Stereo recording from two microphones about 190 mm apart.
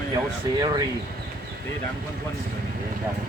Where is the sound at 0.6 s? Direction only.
20° right (ahead or behind).